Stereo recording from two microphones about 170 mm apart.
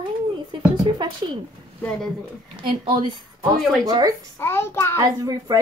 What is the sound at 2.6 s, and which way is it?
Speech, 30° right (ahead or behind).